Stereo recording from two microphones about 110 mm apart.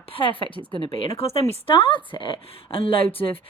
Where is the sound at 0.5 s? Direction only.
50° left (ahead or behind).